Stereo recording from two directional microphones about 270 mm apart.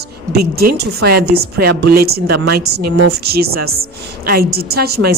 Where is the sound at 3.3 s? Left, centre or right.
Right.